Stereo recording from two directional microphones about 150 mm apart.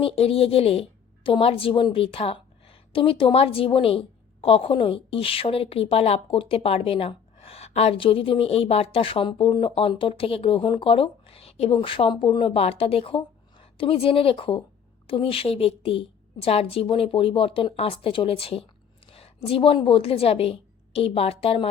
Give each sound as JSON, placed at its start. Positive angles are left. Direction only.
{"t": 0.0, "sound": "a woman's voice", "side_deg": 40}